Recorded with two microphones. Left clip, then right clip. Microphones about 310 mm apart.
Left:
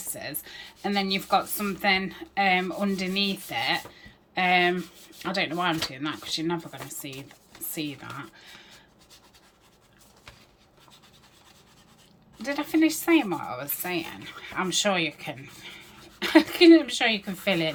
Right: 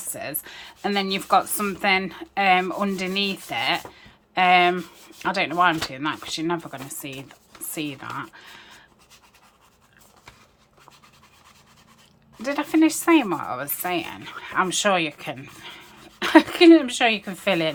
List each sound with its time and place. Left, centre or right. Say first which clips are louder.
0.1 s speech: right 5 dB; centre
12.4 s speech: right 4 dB; centre